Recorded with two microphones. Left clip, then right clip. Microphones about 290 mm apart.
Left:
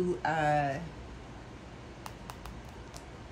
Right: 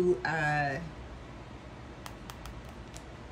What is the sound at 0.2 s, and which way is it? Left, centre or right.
Speech, centre.